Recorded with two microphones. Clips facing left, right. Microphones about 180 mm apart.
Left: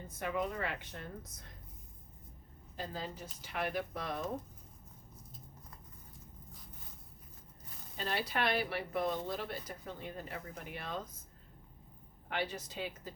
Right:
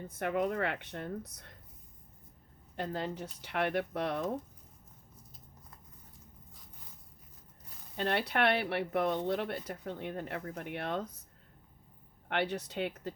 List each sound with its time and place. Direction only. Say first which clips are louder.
0.1 s speech: right 5 dB; 60° right (ahead or behind)
2.7 s speech: right 6 dB; 65° right (ahead or behind)
7.9 s speech: right 5 dB; 65° right (ahead or behind)
12.3 s speech: right 5 dB; 65° right (ahead or behind)